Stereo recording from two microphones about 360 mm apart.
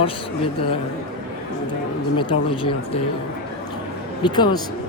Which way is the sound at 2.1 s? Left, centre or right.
Centre.